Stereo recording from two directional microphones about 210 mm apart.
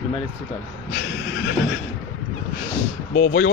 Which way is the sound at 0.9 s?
55° left (ahead or behind).